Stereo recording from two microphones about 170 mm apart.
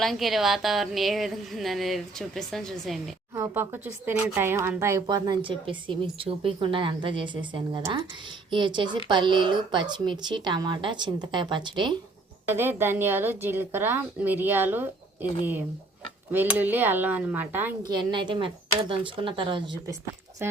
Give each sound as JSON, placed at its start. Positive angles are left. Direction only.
{"t": 0.0, "sound": "a woman's voice", "side_deg": 0}
{"t": 3.3, "sound": "a woman's voice", "side_deg": -15}
{"t": 12.5, "sound": "a woman's voice", "side_deg": -10}
{"t": 16.3, "sound": "a woman's voice", "side_deg": -10}
{"t": 17.8, "sound": "a woman's voice", "side_deg": -25}
{"t": 20.4, "sound": "a woman's voice", "side_deg": -15}